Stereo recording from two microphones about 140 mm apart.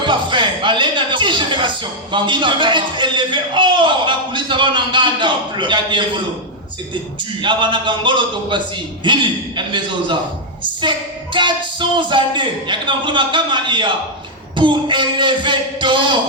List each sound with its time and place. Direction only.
0.0 s speech: 35° right (ahead or behind)
7.4 s a woman's voice: 35° right (ahead or behind)